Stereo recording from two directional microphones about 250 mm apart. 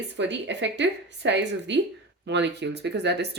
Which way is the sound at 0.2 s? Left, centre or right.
Right.